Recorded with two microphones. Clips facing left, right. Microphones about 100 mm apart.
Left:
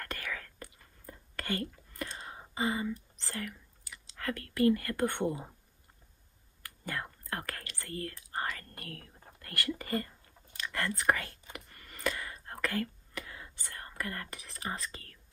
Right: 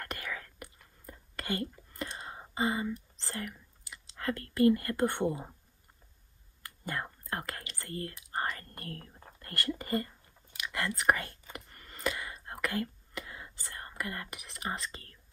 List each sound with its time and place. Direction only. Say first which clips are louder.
0.0 s whispering: even; 25° right (ahead or behind)
2.5 s speech: right 1 dB; 25° right (ahead or behind)
6.6 s whispering: right 1 dB; 25° right (ahead or behind)